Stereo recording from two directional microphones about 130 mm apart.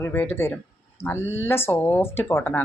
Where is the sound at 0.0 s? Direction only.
15° left (ahead or behind).